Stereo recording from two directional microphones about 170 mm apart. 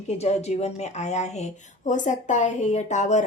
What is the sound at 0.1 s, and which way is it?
Speech, 40° left (ahead or behind).